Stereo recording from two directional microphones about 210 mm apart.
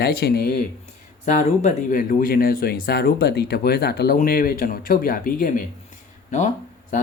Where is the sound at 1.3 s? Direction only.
35° left (ahead or behind).